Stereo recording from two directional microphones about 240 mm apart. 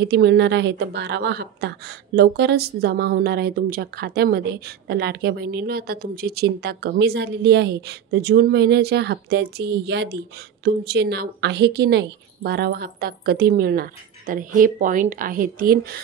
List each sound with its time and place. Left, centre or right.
0.0 s a woman's voice: right